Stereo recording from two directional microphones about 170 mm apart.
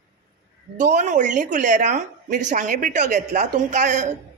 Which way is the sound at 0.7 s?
45° right (ahead or behind).